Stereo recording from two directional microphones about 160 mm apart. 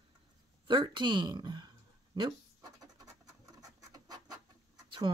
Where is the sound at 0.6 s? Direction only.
30° right (ahead or behind).